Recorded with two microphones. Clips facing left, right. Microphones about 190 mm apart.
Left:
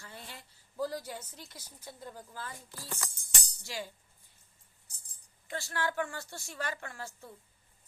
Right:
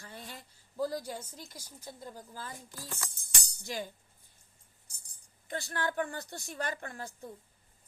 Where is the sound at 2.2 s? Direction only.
40° right (ahead or behind).